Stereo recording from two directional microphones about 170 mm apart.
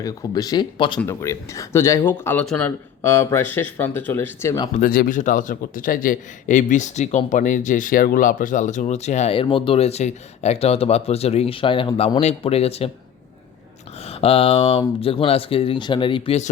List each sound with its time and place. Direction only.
0.0 s speech: 20° left (ahead or behind)
4.8 s a man's voice: 55° left (ahead or behind); by 12.9 s 35° left (ahead or behind)
14.1 s speech: 35° left (ahead or behind)